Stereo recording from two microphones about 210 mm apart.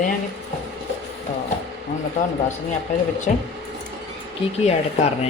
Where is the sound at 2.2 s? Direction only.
40° left (ahead or behind).